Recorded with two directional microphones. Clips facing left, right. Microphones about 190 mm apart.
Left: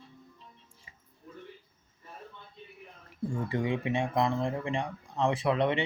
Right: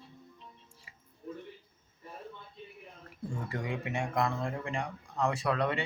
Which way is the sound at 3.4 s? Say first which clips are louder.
Left 6 dB; 20° left (ahead or behind).